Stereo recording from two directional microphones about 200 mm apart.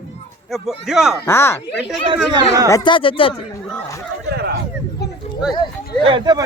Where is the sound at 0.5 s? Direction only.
Centre (ahead or behind).